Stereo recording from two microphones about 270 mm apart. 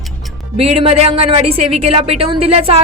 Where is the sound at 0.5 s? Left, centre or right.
Right.